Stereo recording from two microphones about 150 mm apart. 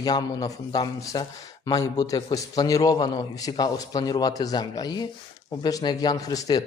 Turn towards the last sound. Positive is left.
turn(degrees=25)  # may be behind; listen again after turning